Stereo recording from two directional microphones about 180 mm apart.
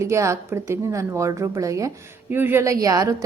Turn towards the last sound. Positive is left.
turn(degrees=-20)  # may be behind; listen again after turning